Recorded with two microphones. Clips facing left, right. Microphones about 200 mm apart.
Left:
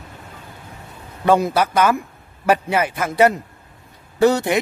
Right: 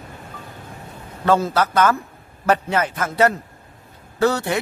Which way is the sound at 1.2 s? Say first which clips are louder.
Left 2 dB; 15° left (ahead or behind).